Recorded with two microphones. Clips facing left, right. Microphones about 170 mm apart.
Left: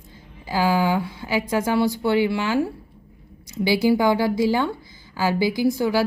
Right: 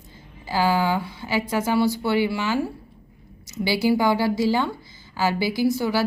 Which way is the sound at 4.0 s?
20° left (ahead or behind).